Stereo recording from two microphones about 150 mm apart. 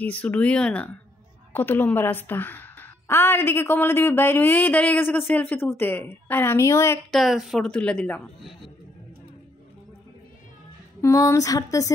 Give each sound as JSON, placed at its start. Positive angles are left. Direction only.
{"t": 0.0, "sound": "a woman's voice", "side_deg": 10}
{"t": 7.1, "sound": "a man's voice", "side_deg": 0}
{"t": 11.0, "sound": "speech", "side_deg": 20}